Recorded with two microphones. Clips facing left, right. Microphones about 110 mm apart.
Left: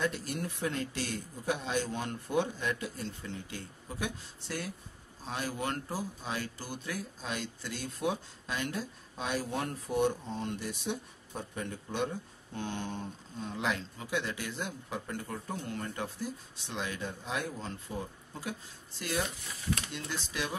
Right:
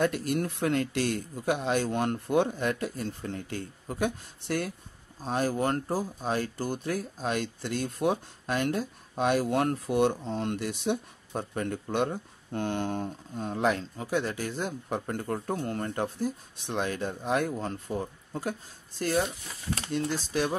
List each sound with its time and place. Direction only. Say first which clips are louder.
0.0 s speech: right 7 dB; 60° right (ahead or behind)
5.2 s speech: right 8 dB; 45° right (ahead or behind)